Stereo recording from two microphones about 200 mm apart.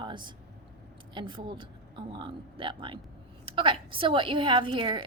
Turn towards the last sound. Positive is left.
turn(degrees=-25)  # may be behind; listen again after turning